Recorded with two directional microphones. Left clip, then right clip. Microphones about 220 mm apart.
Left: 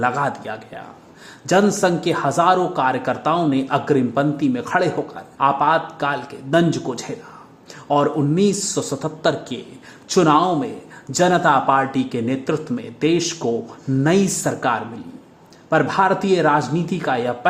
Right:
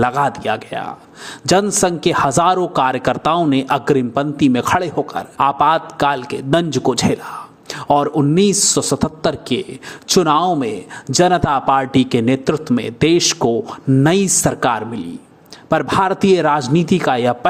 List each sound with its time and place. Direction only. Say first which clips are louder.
0.0 s a man's voice: right 4 dB; 25° right (ahead or behind)